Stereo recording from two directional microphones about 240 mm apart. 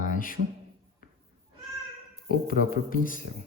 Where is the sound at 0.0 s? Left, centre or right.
Left.